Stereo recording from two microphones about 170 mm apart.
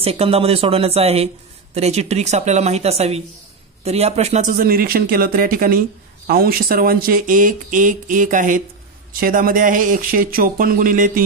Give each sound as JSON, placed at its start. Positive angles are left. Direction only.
{"t": 0.0, "sound": "a man's voice", "side_deg": -35}